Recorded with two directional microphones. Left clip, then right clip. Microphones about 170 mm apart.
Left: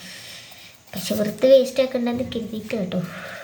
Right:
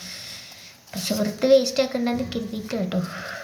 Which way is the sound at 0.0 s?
35° left (ahead or behind).